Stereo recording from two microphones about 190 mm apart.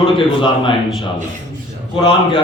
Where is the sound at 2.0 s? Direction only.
25° left (ahead or behind).